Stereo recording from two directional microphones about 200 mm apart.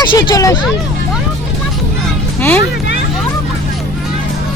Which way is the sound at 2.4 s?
10° left (ahead or behind).